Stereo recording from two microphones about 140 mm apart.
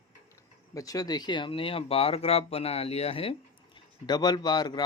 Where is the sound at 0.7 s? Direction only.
25° left (ahead or behind); by 3.3 s 45° left (ahead or behind).